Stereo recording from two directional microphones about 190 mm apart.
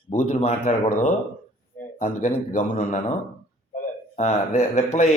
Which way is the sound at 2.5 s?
35° left (ahead or behind).